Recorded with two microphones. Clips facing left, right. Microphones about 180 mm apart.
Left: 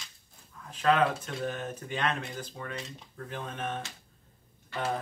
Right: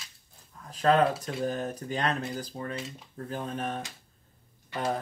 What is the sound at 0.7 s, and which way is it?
Speech, 40° right (ahead or behind).